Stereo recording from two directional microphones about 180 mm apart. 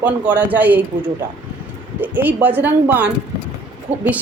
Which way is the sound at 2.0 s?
10° right (ahead or behind).